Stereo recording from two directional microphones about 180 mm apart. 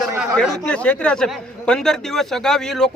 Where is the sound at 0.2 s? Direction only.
Centre (ahead or behind).